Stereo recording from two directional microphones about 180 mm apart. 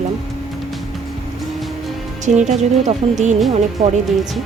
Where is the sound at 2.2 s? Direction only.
40° right (ahead or behind).